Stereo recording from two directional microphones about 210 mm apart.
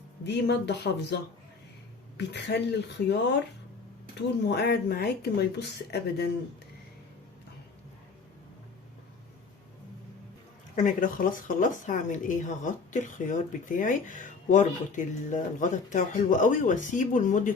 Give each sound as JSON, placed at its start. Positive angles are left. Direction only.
{"t": 0.3, "sound": "speech", "side_deg": 55}
{"t": 10.8, "sound": "speech", "side_deg": 40}